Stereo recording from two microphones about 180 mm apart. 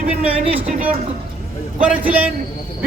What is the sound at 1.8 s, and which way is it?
Speech, 5° right (ahead or behind).